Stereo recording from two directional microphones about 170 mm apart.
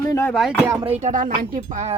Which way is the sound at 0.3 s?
Centre (ahead or behind).